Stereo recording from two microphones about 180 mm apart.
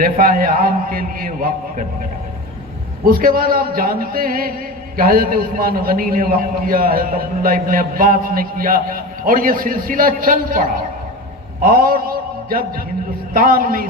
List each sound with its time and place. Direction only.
0.0 s a man's voice: 50° right (ahead or behind)
3.0 s a man's voice: 50° right (ahead or behind)
11.6 s a sound: 55° right (ahead or behind)
13.3 s a man's voice: 50° right (ahead or behind)